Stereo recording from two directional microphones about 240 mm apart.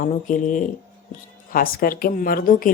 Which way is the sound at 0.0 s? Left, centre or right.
Left.